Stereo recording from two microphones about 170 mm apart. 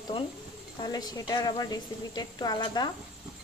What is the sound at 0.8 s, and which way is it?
Speech, 25° left (ahead or behind).